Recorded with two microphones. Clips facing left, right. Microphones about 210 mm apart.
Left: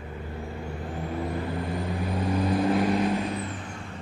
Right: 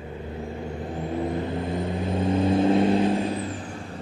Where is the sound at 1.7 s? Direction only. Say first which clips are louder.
Right 3 dB; 20° right (ahead or behind).